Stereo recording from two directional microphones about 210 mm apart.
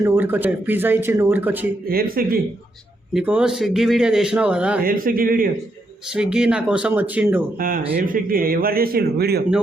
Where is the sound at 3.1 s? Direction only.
5° right (ahead or behind).